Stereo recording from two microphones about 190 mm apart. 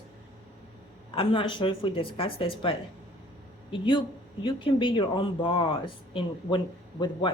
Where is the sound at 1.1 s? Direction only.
30° left (ahead or behind).